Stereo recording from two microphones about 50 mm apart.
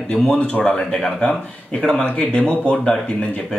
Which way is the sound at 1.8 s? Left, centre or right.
Centre.